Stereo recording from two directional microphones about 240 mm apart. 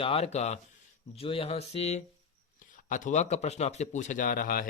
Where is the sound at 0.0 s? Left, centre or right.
Left.